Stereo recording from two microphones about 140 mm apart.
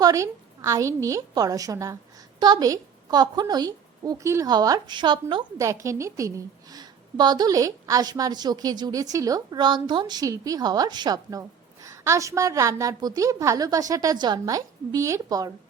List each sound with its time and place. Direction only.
0.0 s a woman's voice: 25° right (ahead or behind)
5.6 s a woman's voice: 20° right (ahead or behind)